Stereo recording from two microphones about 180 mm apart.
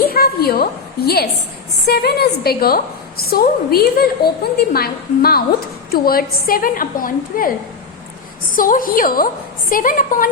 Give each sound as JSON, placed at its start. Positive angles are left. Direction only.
{"t": 0.0, "sound": "a sound", "side_deg": 55}
{"t": 1.9, "sound": "a woman's voice", "side_deg": 60}
{"t": 8.5, "sound": "a woman's voice", "side_deg": 50}